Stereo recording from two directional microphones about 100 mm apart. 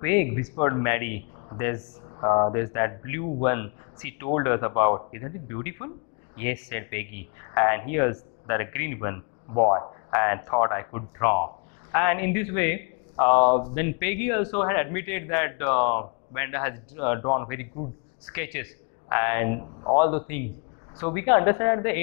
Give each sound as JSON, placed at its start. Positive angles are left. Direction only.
{"t": 0.0, "sound": "speech", "side_deg": 25}